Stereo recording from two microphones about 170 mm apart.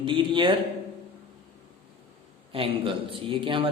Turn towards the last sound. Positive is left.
turn(degrees=-30)  # may be behind; listen again after turning